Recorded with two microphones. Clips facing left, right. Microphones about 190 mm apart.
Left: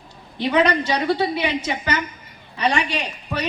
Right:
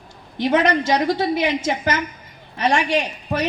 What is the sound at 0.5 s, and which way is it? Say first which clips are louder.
A woman's voice: even; 65° left (ahead or behind).